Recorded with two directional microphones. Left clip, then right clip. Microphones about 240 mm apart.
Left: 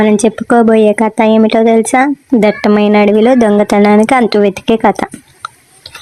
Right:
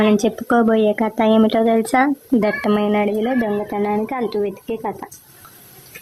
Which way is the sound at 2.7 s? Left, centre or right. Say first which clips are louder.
Left 9 dB; centre.